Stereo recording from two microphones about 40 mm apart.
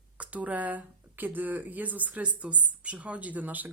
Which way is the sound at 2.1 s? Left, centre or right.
Right.